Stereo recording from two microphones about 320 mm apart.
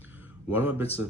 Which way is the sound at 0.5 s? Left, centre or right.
Centre.